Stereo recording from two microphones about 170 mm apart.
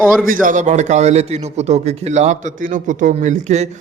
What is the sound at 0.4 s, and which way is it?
A man's voice, 45° right (ahead or behind).